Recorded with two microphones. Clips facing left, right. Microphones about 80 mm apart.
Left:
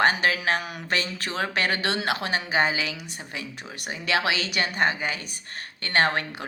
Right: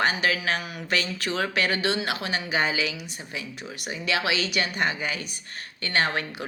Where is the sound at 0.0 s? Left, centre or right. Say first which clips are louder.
Left 2 dB; left.